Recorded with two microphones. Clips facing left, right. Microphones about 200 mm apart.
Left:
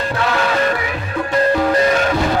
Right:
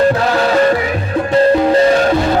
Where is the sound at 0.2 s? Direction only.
35° right (ahead or behind).